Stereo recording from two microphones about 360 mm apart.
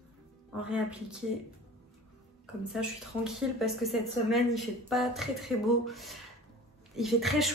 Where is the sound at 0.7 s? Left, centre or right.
Centre.